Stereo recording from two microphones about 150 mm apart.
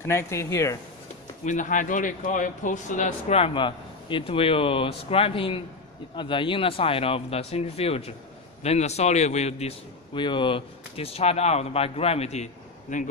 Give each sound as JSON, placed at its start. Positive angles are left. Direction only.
{"t": 0.0, "sound": "speech", "side_deg": 15}
{"t": 1.4, "sound": "a man's voice", "side_deg": 55}
{"t": 10.1, "sound": "a man's voice", "side_deg": 30}
{"t": 12.9, "sound": "a man's voice", "side_deg": 55}